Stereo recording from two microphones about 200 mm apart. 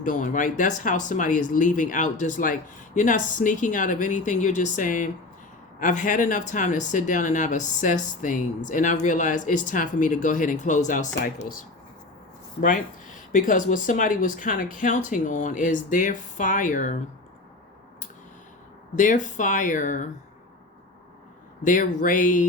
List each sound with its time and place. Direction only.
0.0 s speech: 40° left (ahead or behind)
13.3 s speech: 40° left (ahead or behind)
18.9 s speech: 40° left (ahead or behind)
21.6 s speech: 40° left (ahead or behind)